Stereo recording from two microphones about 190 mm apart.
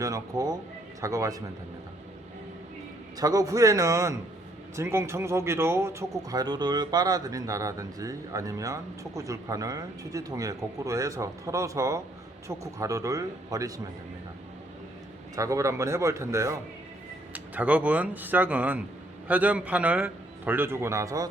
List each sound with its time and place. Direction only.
0.0 s speech: 20° right (ahead or behind)
3.2 s speech: 20° right (ahead or behind)
15.4 s speech: 15° right (ahead or behind)